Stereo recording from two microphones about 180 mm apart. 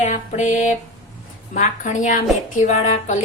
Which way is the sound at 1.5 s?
45° left (ahead or behind).